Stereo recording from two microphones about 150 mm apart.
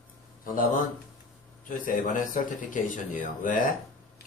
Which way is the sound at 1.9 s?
65° left (ahead or behind).